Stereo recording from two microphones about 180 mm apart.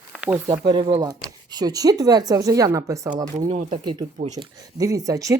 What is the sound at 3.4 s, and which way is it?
Speech, 40° right (ahead or behind).